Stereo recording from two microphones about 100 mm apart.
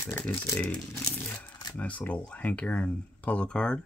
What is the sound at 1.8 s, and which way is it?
Speech, 15° left (ahead or behind).